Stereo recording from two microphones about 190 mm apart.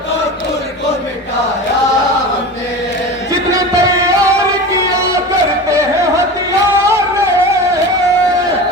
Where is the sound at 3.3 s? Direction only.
15° right (ahead or behind).